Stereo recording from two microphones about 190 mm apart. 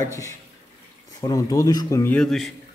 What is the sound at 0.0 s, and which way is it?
Speech, 15° left (ahead or behind).